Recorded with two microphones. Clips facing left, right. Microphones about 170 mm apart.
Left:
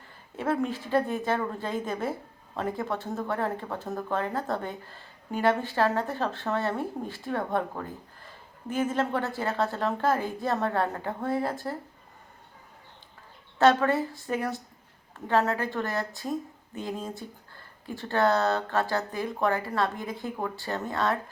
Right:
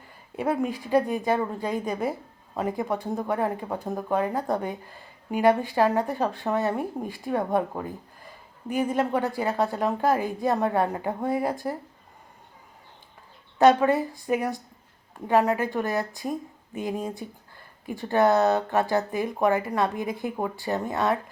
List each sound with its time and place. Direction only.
0.3 s speech: 10° right (ahead or behind)
13.6 s speech: 15° right (ahead or behind)